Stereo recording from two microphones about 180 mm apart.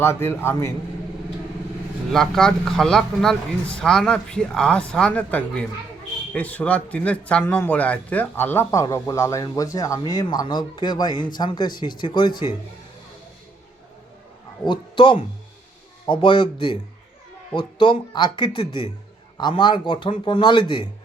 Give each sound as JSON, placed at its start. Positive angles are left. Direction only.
{"t": 0.0, "sound": "a man's voice", "side_deg": 15}
{"t": 2.1, "sound": "a man's voice", "side_deg": 0}
{"t": 14.7, "sound": "a man's voice", "side_deg": 25}